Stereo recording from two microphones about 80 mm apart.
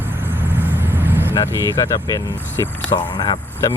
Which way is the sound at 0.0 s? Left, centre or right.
Right.